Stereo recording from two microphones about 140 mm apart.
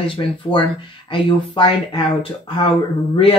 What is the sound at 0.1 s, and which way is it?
Speech, 35° left (ahead or behind).